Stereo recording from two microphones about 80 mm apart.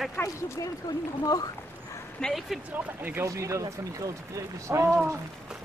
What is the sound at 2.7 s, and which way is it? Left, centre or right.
Speech, right.